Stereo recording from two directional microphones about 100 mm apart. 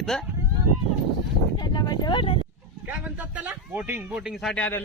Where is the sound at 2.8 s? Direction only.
10° right (ahead or behind).